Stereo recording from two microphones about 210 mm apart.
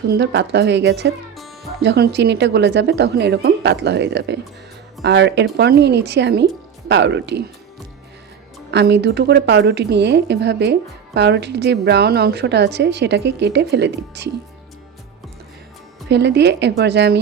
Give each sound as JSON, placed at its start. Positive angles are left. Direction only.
{"t": 0.1, "sound": "a woman's voice", "side_deg": -55}
{"t": 8.7, "sound": "speech", "side_deg": -55}
{"t": 16.0, "sound": "a woman's voice", "side_deg": -55}